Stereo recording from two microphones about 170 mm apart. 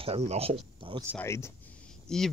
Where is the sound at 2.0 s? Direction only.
5° left (ahead or behind).